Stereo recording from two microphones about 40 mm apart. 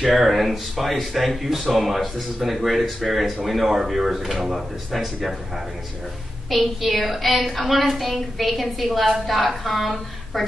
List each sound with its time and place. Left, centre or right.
0.0 s speech: centre
6.5 s speech: centre